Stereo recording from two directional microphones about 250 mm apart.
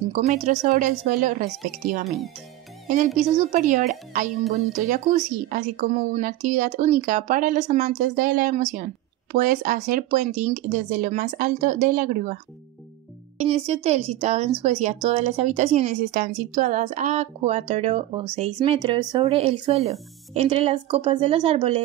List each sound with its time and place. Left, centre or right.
0.1 s a woman's voice: right
2.0 s speech: centre
3.2 s a woman's voice: right
13.4 s a woman's voice: right